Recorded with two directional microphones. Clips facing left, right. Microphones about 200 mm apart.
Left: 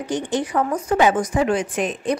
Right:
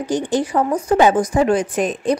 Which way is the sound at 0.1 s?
35° right (ahead or behind).